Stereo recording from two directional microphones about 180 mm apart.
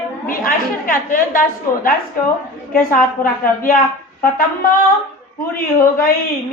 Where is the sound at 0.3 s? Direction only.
50° left (ahead or behind).